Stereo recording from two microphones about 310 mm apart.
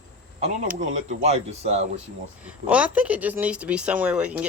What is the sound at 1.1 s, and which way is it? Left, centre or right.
Speech, right.